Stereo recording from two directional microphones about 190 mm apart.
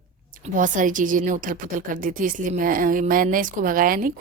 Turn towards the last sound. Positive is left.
turn(degrees=-45)  # may be behind; listen again after turning